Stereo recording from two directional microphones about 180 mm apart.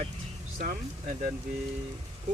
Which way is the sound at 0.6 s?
45° right (ahead or behind).